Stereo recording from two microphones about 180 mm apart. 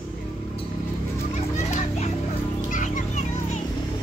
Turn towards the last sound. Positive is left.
turn(degrees=45)  # may be behind; listen again after turning